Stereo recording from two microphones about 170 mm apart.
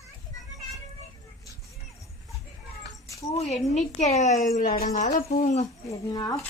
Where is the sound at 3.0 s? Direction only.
20° left (ahead or behind).